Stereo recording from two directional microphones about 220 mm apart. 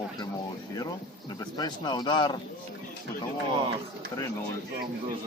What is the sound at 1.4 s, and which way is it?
A man's voice, 20° left (ahead or behind).